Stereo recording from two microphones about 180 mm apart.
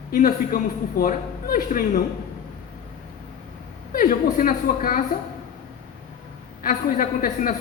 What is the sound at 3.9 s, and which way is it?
A man's voice, 50° left (ahead or behind).